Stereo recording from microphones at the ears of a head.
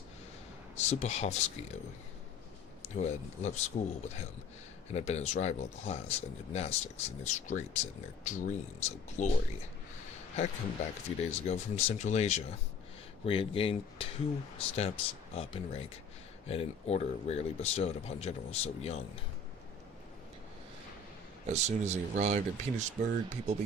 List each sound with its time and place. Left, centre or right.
0.8 s speech: left
21.5 s speech: right